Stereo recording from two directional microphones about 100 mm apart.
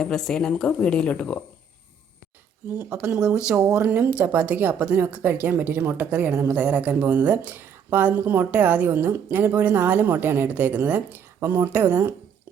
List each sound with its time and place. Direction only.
0.0 s a woman's voice: 5° left (ahead or behind)
2.6 s a woman's voice: 15° right (ahead or behind)